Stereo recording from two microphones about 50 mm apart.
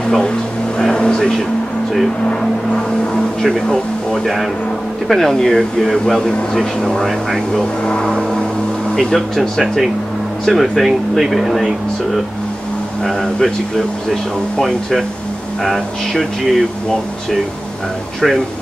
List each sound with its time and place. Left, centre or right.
0.0 s speech: centre
3.4 s speech: centre
7.8 s speech: centre
8.1 s a sound: centre
9.1 s speech: centre
14.6 s speech: centre